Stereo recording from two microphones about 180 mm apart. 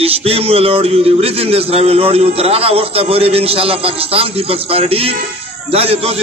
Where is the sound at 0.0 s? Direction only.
35° right (ahead or behind).